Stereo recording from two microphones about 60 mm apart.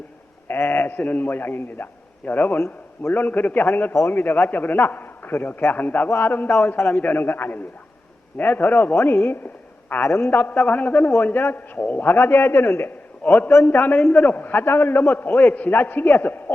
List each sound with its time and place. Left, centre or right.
0.4 s a man's voice: left
2.6 s a man's voice: left
3.1 s a man's voice: left
6.1 s a man's voice: left
10.0 s a man's voice: left
13.2 s a man's voice: left